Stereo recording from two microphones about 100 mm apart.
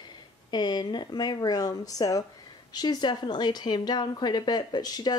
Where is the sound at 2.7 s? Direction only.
50° left (ahead or behind).